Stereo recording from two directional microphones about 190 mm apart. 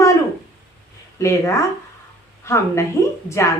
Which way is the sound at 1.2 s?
15° left (ahead or behind).